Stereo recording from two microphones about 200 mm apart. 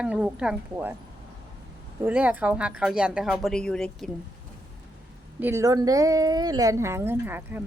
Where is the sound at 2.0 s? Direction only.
5° right (ahead or behind).